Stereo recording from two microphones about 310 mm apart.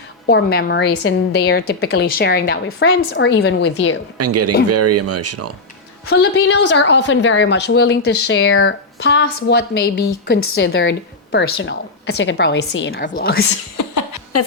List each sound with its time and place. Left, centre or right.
0.3 s a woman's voice: left
4.2 s speech: right
6.1 s a woman's voice: left
13.7 s chuckle: left